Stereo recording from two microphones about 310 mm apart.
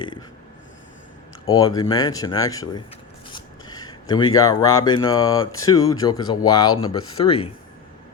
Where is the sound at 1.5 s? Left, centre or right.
Centre.